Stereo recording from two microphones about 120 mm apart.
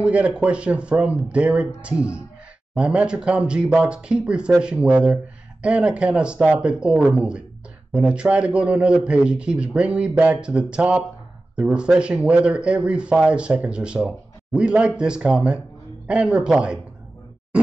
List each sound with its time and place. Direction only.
0.0 s speech: 10° right (ahead or behind)